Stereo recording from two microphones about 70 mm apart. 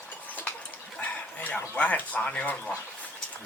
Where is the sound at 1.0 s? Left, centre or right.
Left.